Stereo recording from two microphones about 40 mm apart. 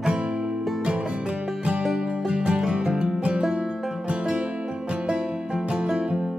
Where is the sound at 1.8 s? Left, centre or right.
Centre.